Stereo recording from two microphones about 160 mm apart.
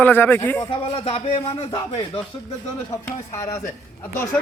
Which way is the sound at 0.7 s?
35° left (ahead or behind).